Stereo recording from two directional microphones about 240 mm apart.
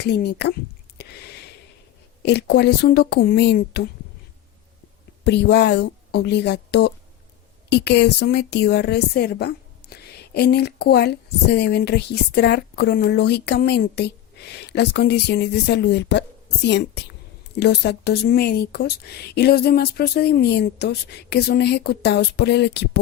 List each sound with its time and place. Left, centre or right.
0.0 s a woman's voice: left
0.9 s a sound: left
2.2 s a woman's voice: left
5.2 s a woman's voice: left